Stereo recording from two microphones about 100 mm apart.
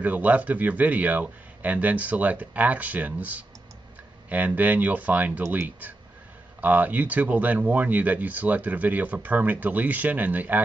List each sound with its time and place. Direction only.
0.0 s speech: 15° right (ahead or behind)